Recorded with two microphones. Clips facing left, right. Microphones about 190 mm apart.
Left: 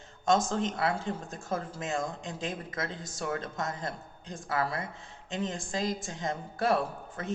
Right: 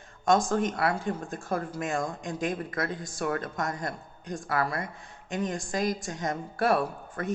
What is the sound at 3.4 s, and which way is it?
Speech, 20° left (ahead or behind).